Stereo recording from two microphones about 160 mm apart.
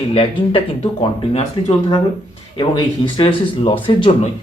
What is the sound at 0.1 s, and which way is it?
A man's voice, 35° left (ahead or behind).